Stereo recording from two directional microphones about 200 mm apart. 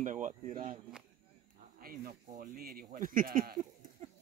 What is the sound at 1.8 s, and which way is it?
Speech, 50° right (ahead or behind).